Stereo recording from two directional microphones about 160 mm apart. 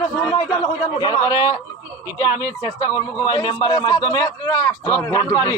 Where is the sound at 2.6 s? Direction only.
20° left (ahead or behind).